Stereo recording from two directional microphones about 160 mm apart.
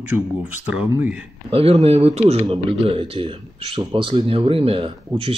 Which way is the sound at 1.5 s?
40° right (ahead or behind).